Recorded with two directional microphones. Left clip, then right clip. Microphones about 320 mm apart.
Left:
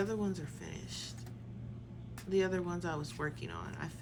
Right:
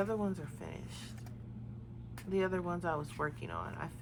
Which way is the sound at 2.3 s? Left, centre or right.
Centre.